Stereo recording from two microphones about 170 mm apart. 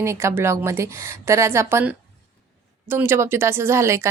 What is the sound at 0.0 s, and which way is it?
A woman's voice, 15° right (ahead or behind).